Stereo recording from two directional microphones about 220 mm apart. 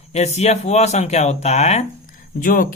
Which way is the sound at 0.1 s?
30° left (ahead or behind).